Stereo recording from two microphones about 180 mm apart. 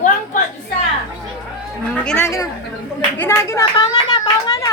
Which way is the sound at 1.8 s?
10° left (ahead or behind).